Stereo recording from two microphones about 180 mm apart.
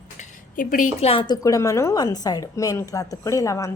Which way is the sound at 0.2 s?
50° left (ahead or behind).